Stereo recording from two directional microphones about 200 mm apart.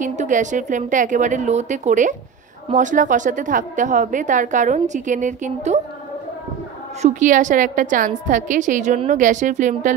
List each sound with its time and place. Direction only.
0.0 s a woman's voice: 40° right (ahead or behind)
7.0 s a woman's voice: 40° right (ahead or behind)